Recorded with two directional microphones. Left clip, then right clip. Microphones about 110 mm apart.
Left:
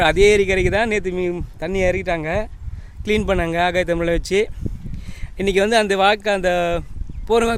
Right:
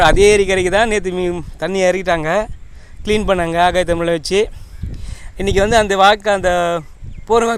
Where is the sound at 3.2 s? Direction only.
25° left (ahead or behind).